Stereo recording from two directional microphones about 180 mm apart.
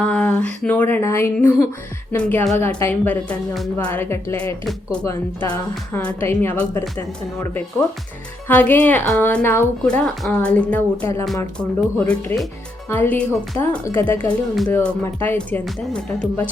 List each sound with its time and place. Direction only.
0.0 s speech: 5° left (ahead or behind)